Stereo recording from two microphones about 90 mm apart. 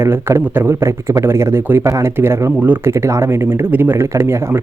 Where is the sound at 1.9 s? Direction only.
35° right (ahead or behind).